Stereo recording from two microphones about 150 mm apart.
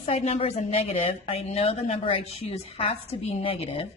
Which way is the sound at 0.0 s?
45° left (ahead or behind).